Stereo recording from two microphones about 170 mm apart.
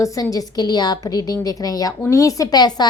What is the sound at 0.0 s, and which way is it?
A woman's voice, 20° left (ahead or behind).